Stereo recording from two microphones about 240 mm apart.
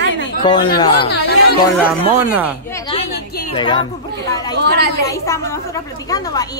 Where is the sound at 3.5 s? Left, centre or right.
Centre.